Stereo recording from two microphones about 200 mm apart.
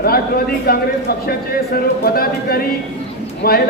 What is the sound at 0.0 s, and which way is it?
A man's voice, 50° left (ahead or behind).